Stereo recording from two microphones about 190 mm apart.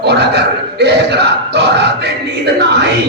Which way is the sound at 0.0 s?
60° right (ahead or behind).